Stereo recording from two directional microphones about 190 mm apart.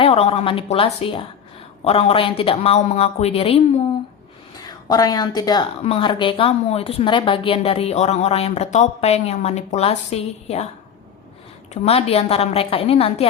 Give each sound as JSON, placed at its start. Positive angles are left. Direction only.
{"t": 0.0, "sound": "a woman's voice", "side_deg": 30}
{"t": 4.6, "sound": "a woman's voice", "side_deg": 20}
{"t": 11.7, "sound": "a woman's voice", "side_deg": 30}